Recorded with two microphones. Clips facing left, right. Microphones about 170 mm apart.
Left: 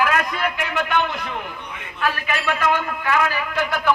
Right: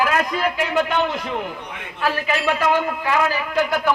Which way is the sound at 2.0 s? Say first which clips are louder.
Right 2 dB; 25° right (ahead or behind).